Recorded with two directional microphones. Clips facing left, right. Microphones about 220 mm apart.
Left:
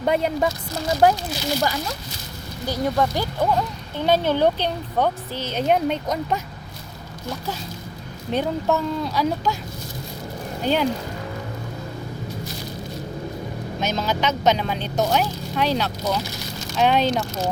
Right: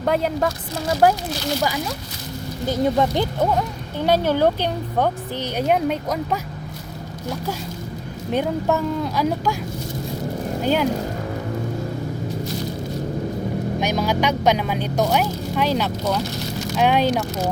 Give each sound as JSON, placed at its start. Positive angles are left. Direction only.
{"t": 0.0, "sound": "speech", "side_deg": 0}
{"t": 2.6, "sound": "speech", "side_deg": -20}
{"t": 8.3, "sound": "speech", "side_deg": -10}
{"t": 13.7, "sound": "speech", "side_deg": -15}